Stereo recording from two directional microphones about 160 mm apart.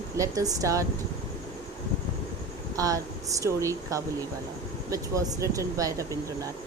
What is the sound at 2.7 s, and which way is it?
Speech, 20° right (ahead or behind).